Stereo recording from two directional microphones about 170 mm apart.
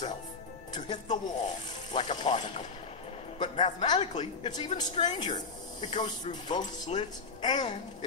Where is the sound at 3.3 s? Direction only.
30° left (ahead or behind).